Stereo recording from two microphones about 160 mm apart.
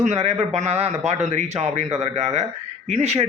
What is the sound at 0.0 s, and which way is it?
A man's voice, 45° right (ahead or behind).